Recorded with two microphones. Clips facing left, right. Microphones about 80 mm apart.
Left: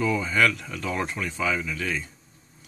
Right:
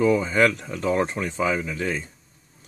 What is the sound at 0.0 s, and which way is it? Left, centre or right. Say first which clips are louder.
Speech: right 4 dB; right.